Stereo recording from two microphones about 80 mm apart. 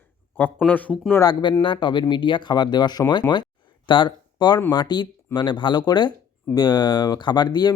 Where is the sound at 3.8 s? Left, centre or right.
Left.